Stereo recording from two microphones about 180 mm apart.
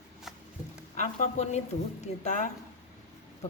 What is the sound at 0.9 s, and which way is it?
Speech, 40° left (ahead or behind).